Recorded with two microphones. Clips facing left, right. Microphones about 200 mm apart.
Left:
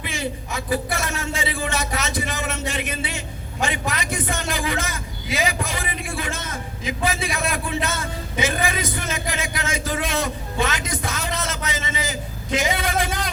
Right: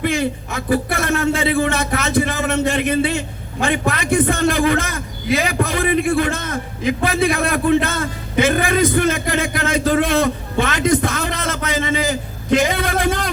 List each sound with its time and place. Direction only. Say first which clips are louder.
0.0 s speech: right 9 dB; 55° right (ahead or behind)